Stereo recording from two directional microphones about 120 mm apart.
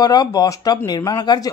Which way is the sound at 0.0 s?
35° left (ahead or behind).